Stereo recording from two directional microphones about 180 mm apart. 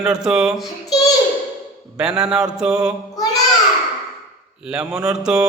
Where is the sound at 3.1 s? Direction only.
20° left (ahead or behind).